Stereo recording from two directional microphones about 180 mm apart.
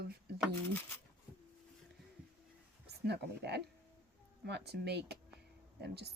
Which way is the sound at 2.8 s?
65° right (ahead or behind).